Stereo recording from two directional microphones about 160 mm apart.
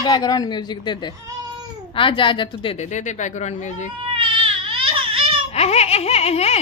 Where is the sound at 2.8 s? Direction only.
50° left (ahead or behind).